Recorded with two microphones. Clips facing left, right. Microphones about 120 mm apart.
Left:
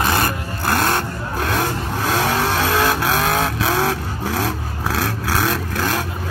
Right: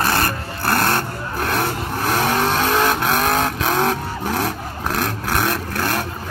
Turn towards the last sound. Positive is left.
turn(degrees=0)  # may be behind; listen again after turning